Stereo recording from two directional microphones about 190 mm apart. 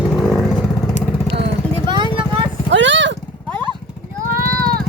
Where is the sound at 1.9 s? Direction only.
25° right (ahead or behind).